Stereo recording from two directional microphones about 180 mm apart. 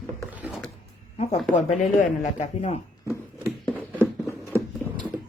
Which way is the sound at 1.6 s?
40° left (ahead or behind).